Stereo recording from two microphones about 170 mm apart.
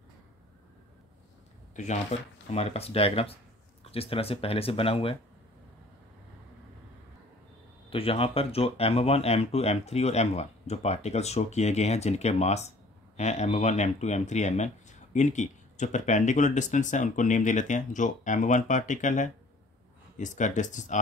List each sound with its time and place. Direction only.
1.8 s speech: 45° left (ahead or behind)
7.9 s speech: 35° left (ahead or behind)